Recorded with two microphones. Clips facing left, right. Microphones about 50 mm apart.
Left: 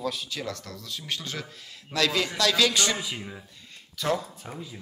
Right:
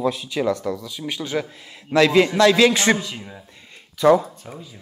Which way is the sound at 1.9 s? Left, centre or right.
Right.